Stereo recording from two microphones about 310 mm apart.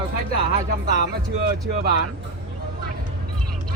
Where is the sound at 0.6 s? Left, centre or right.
Right.